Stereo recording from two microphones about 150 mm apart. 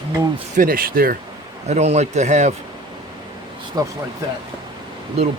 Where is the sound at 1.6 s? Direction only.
50° right (ahead or behind).